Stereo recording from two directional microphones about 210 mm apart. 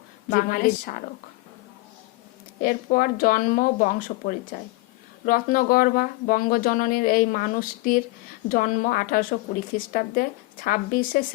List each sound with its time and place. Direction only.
0.3 s speech: 40° left (ahead or behind)
2.6 s a woman's voice: 40° left (ahead or behind)